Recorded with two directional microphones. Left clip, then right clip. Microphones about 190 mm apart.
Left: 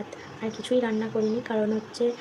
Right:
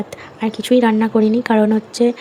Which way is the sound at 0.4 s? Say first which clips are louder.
Right 11 dB; 45° right (ahead or behind).